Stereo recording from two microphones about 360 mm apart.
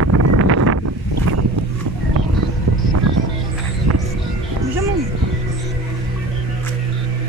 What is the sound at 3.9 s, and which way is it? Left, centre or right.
Music, right.